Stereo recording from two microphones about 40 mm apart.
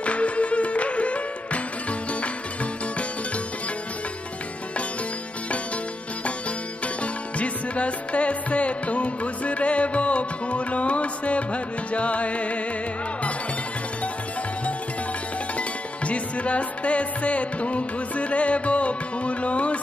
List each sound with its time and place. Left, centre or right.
0.0 s music: left
7.0 s music: left
15.5 s music: left